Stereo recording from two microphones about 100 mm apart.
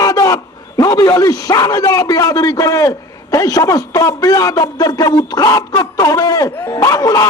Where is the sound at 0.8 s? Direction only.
35° left (ahead or behind).